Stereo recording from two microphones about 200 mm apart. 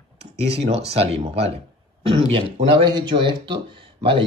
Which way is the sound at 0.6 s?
30° right (ahead or behind).